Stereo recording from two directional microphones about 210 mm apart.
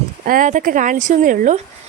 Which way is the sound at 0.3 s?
40° right (ahead or behind).